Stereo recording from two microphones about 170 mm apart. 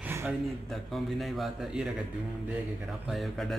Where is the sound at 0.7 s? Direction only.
Centre (ahead or behind).